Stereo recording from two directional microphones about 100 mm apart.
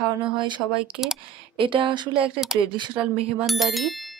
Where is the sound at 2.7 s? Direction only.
50° right (ahead or behind).